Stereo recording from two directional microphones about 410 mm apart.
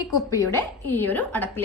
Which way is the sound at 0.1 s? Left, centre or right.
Centre.